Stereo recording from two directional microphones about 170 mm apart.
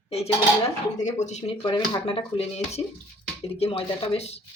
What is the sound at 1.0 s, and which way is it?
Speech, 45° left (ahead or behind).